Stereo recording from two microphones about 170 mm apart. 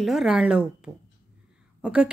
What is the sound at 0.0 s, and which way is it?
A woman's voice, centre (ahead or behind).